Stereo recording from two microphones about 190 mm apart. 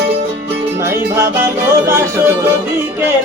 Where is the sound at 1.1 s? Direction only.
15° right (ahead or behind).